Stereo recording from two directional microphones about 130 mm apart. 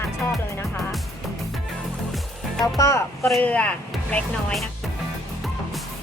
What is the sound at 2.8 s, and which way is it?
Speech, 25° left (ahead or behind).